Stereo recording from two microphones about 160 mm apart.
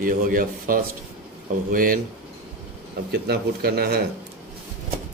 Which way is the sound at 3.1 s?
85° right.